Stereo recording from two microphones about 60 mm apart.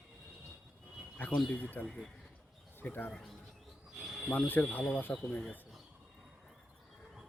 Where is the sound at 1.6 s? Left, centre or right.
Left.